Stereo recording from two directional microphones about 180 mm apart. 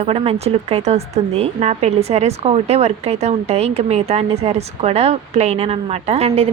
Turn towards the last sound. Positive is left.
turn(degrees=-35)  # may be behind; listen again after turning